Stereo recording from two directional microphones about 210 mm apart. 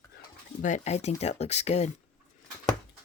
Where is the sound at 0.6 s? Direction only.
35° left (ahead or behind).